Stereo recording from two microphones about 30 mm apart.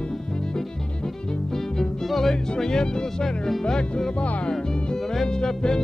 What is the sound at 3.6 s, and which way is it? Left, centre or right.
Music, left.